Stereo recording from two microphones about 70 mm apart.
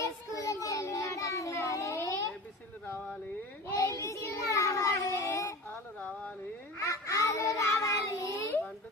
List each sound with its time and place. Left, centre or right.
0.0 s child singing: left
3.7 s child singing: left
5.1 s a sound: left
6.7 s child singing: left